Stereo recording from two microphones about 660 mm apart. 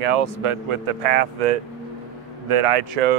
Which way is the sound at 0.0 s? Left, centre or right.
Right.